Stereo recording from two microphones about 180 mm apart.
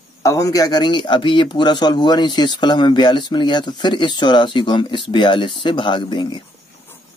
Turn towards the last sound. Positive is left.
turn(degrees=25)  # may be behind; listen again after turning